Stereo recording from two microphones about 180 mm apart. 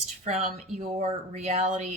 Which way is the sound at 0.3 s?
40° right (ahead or behind).